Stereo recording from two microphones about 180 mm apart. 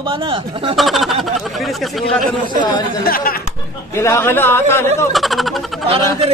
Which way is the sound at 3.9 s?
15° left (ahead or behind).